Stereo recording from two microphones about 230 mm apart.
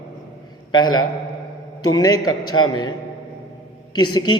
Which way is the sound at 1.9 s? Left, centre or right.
Centre.